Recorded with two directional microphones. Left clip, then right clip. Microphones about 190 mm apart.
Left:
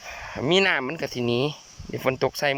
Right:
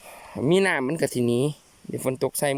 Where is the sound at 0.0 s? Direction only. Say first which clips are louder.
Even; 40° right (ahead or behind).